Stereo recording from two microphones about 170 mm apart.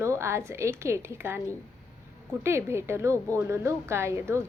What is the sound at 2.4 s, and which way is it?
A woman's voice, 15° right (ahead or behind).